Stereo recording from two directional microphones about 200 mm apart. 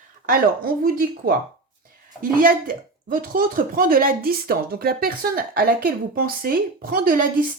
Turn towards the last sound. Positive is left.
turn(degrees=-45)  # may be behind; listen again after turning